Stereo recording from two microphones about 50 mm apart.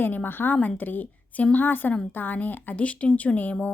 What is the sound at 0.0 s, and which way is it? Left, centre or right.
A woman's voice, left.